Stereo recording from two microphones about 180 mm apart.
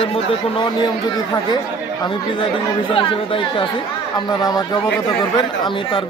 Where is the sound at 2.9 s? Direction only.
30° left (ahead or behind).